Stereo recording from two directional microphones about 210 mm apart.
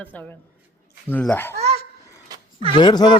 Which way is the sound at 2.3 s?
25° right (ahead or behind).